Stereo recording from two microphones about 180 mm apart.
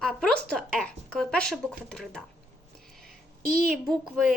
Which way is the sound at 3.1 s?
55° right (ahead or behind).